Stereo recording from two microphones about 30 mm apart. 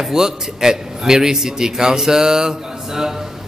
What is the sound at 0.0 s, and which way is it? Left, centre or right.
A man's voice, centre.